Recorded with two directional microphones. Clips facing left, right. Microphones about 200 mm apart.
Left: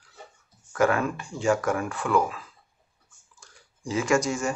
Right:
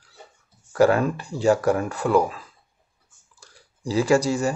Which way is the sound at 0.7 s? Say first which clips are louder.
Right 5 dB; 35° right (ahead or behind).